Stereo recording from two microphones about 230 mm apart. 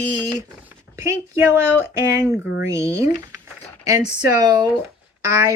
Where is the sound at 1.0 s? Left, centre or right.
Centre.